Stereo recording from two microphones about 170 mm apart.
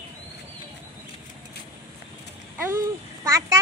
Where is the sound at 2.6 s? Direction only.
20° right (ahead or behind).